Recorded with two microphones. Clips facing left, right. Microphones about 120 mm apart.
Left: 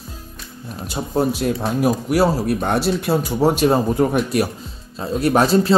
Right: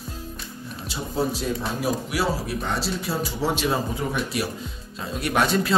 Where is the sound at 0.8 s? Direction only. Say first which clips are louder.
Left 6 dB; 55° left (ahead or behind).